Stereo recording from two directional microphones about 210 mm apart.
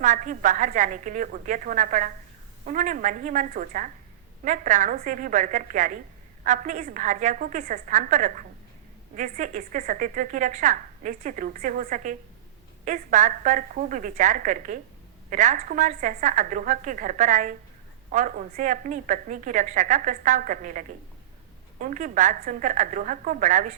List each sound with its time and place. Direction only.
0.0 s a woman's voice: 35° right (ahead or behind)